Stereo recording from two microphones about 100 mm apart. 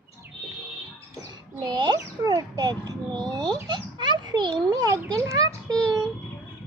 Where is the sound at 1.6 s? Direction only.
45° right (ahead or behind).